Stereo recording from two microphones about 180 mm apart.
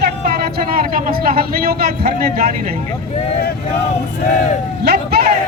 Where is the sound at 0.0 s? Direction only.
60° right (ahead or behind).